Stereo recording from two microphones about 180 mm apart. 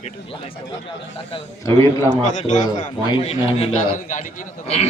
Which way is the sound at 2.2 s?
40° left (ahead or behind).